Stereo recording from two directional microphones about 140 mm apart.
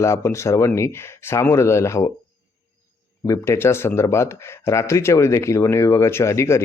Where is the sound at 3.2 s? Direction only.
20° left (ahead or behind).